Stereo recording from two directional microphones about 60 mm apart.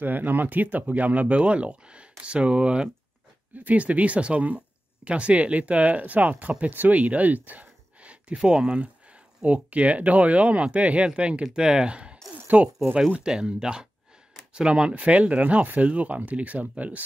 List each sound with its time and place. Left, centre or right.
0.0 s speech: right